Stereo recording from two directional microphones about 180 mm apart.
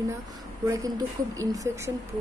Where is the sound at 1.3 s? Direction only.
20° right (ahead or behind).